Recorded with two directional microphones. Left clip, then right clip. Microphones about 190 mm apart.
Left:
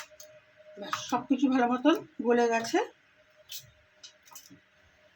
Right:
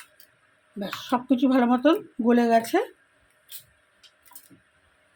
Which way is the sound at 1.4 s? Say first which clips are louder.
Right 5 dB; 60° right (ahead or behind).